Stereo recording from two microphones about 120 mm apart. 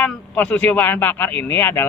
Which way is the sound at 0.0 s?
10° left (ahead or behind).